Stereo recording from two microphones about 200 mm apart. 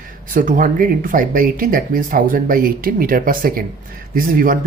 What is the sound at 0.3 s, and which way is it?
Speech, 40° right (ahead or behind).